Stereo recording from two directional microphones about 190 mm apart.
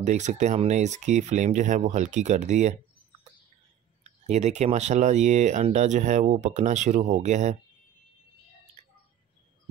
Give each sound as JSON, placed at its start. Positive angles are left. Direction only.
{"t": 0.0, "sound": "speech", "side_deg": -40}
{"t": 4.0, "sound": "speech", "side_deg": -35}
{"t": 8.8, "sound": "bird", "side_deg": -35}